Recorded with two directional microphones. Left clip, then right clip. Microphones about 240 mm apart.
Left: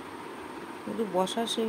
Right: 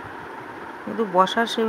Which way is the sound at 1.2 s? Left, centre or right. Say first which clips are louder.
Right 9 dB; centre.